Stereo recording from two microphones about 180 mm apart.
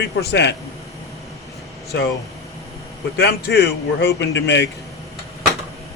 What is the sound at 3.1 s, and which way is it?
A man's voice, 65° left (ahead or behind).